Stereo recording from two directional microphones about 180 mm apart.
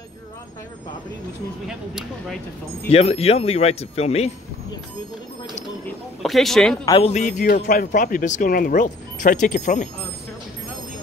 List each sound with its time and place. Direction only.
1.7 s speech: 5° right (ahead or behind)
2.9 s speech: 35° left (ahead or behind)
6.2 s speech: centre (ahead or behind)
6.9 s speech: 35° left (ahead or behind)